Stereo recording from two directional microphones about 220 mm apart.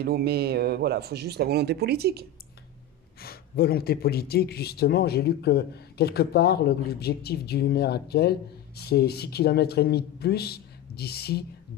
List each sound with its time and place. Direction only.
0.0 s speech: 45° right (ahead or behind)
3.2 s speech: 45° left (ahead or behind)